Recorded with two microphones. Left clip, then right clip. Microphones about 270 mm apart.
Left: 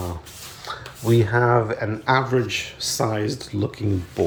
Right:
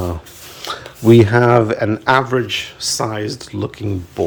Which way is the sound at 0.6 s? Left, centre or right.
Right.